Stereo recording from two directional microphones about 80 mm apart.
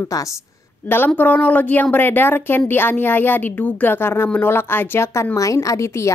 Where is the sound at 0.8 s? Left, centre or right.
Left.